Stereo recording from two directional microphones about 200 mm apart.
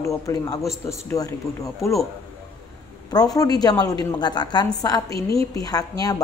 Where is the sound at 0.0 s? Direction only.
15° left (ahead or behind).